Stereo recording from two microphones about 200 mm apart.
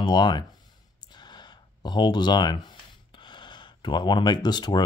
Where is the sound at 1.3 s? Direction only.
20° left (ahead or behind).